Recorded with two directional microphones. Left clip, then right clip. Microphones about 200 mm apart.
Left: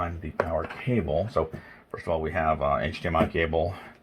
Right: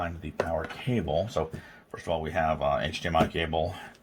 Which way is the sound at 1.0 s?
25° left (ahead or behind).